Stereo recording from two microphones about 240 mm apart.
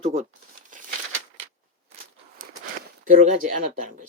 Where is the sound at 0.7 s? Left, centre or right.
Right.